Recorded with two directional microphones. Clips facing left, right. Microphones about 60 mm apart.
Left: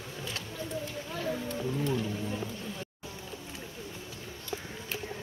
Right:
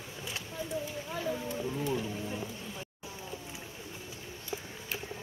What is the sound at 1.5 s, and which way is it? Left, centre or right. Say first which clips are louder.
Music: left 2 dB; centre.